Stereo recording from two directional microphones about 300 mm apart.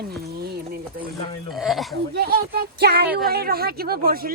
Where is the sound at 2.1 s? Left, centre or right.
Right.